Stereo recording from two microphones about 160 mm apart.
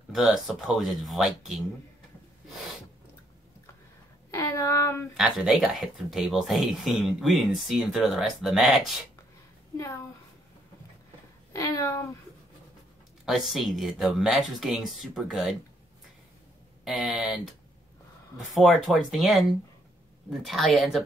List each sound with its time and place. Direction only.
0.1 s speech: centre (ahead or behind)
4.3 s a sound: 20° left (ahead or behind)
5.1 s speech: 5° right (ahead or behind)
11.5 s speech: 20° left (ahead or behind)
13.2 s speech: centre (ahead or behind)
16.8 s speech: centre (ahead or behind)
18.5 s speech: centre (ahead or behind)